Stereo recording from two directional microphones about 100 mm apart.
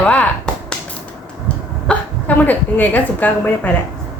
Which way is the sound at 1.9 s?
15° left (ahead or behind).